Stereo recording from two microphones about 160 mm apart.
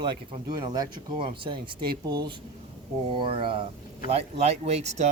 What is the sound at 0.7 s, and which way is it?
Speech, 30° right (ahead or behind).